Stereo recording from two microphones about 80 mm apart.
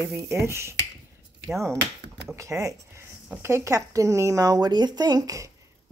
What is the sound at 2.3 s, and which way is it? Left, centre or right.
Speech, right.